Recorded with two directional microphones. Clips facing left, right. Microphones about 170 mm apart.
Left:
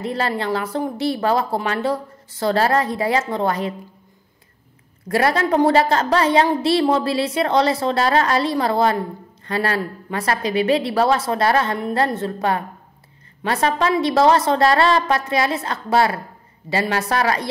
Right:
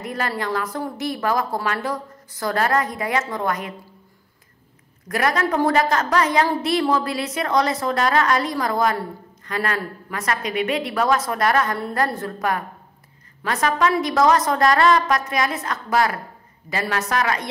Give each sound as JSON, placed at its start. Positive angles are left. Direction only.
{"t": 0.0, "sound": "a sound", "side_deg": 30}
{"t": 0.4, "sound": "a woman's voice", "side_deg": 30}
{"t": 5.0, "sound": "a woman's voice", "side_deg": 30}